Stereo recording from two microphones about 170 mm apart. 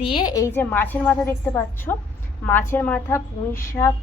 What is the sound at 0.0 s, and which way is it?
A woman's voice, 30° left (ahead or behind).